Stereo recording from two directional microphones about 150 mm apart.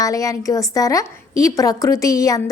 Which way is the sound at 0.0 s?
20° left (ahead or behind).